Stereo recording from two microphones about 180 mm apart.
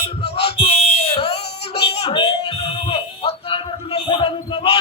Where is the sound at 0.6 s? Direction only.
35° left (ahead or behind).